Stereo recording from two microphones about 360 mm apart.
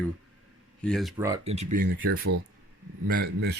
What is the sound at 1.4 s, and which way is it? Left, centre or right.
A man's voice, centre.